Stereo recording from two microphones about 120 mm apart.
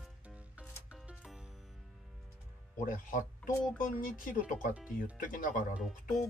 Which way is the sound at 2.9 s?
90° left.